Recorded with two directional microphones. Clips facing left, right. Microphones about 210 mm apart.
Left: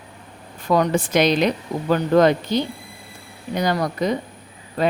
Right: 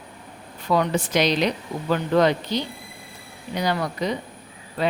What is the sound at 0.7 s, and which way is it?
Speech, 45° left (ahead or behind).